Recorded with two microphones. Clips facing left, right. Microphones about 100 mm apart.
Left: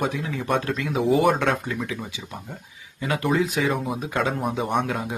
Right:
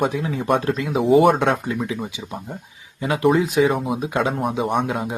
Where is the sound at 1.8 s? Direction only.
20° right (ahead or behind).